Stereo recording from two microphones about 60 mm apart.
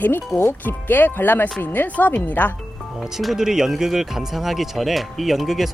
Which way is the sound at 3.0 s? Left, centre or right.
Centre.